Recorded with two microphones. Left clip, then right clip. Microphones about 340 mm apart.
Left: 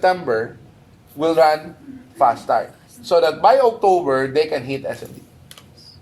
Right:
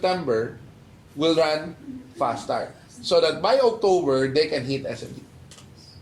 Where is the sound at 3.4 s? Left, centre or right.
Left.